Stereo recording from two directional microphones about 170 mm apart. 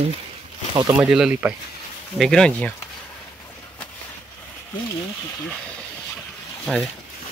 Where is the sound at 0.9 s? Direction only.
5° right (ahead or behind).